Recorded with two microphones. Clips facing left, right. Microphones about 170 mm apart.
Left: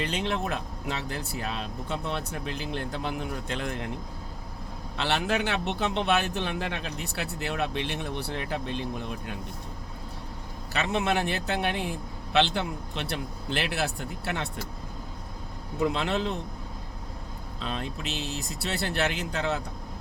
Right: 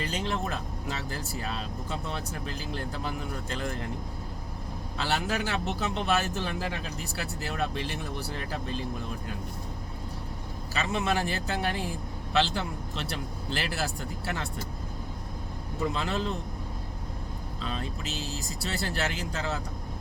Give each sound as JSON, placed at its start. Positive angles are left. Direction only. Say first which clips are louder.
{"t": 0.0, "sound": "a man's voice", "louder": "left 2 dB", "side_deg": 65}
{"t": 4.9, "sound": "a man's voice", "louder": "left 3 dB", "side_deg": 65}
{"t": 10.8, "sound": "a man's voice", "louder": "left 2 dB", "side_deg": 65}
{"t": 15.8, "sound": "a man's voice", "louder": "left 3 dB", "side_deg": 65}
{"t": 17.6, "sound": "a man's voice", "louder": "left 2 dB", "side_deg": 65}